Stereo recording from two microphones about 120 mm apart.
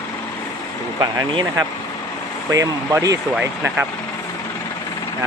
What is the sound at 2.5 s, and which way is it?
Speech, 30° right (ahead or behind).